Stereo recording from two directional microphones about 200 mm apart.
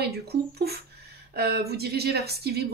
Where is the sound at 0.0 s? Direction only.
55° right (ahead or behind).